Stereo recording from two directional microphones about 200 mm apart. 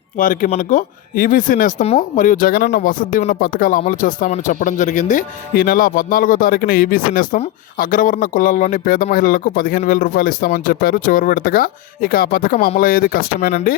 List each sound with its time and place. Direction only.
0.2 s speech: 45° left (ahead or behind)